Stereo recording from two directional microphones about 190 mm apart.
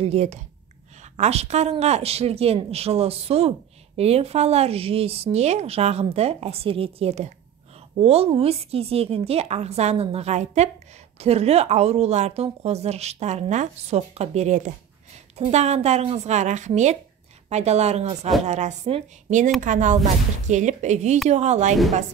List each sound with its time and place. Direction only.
0.0 s speech: 35° right (ahead or behind)